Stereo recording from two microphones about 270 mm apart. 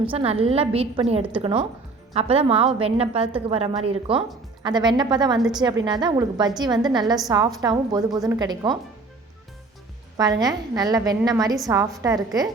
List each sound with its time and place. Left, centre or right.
0.0 s a woman's voice: centre
10.4 s a woman's voice: centre